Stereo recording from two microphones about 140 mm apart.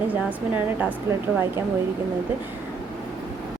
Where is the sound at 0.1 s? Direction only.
10° right (ahead or behind).